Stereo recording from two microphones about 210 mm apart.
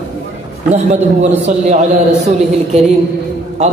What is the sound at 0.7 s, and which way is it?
A man's voice, 30° right (ahead or behind).